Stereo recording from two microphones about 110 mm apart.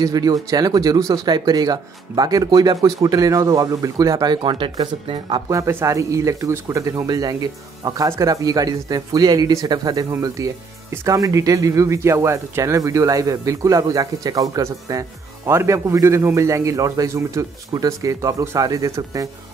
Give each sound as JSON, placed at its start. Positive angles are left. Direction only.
{"t": 0.0, "sound": "speech", "side_deg": -35}
{"t": 5.5, "sound": "speech", "side_deg": -25}